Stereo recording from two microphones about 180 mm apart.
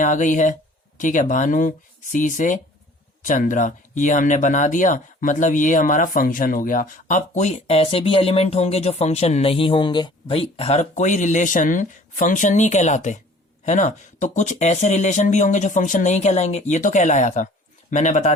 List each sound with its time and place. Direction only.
0.0 s speech: 45° left (ahead or behind)